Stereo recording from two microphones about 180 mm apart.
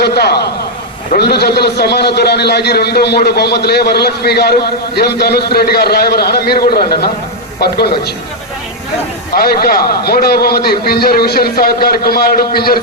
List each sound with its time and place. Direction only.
0.0 s a sound: 65° left (ahead or behind)
1.1 s a man's voice: 65° left (ahead or behind)
9.3 s a man's voice: 60° left (ahead or behind)